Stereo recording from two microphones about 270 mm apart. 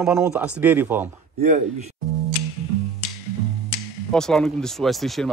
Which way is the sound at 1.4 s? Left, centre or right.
Right.